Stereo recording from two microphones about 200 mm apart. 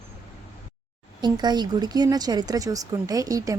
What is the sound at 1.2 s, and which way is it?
Speech, 20° right (ahead or behind).